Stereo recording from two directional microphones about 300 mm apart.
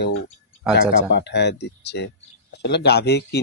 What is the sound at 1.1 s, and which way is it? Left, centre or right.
Speech, left.